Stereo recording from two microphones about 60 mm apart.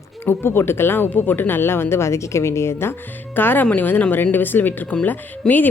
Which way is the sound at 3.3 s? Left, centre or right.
Left.